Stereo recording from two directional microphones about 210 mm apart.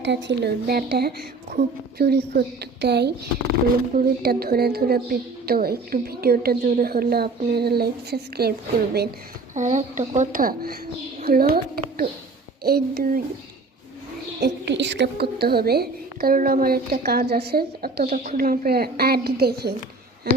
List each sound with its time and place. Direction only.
0.0 s a woman's voice: 60° right (ahead or behind)
9.6 s a woman's voice: 35° right (ahead or behind)
14.4 s a woman's voice: 55° right (ahead or behind)